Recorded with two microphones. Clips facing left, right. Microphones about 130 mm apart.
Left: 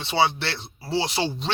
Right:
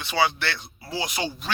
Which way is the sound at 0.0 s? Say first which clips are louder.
Left 1 dB; 25° left (ahead or behind).